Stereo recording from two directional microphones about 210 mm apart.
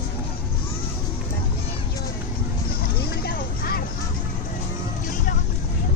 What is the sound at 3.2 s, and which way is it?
Vehicle, 45° left (ahead or behind).